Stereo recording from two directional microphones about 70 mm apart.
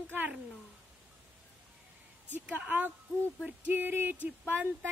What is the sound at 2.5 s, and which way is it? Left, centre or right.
Speech, right.